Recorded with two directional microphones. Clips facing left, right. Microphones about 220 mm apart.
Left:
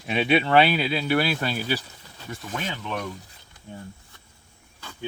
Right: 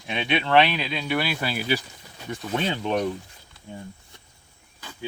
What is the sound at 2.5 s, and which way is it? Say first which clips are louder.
Speech: right 7 dB; 30° right (ahead or behind).